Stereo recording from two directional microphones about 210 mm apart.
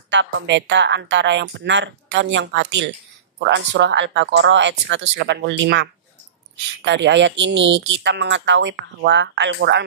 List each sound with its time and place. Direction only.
0.1 s speech: 60° right (ahead or behind)